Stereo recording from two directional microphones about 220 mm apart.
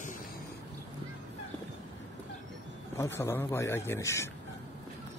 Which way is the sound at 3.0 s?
10° left (ahead or behind).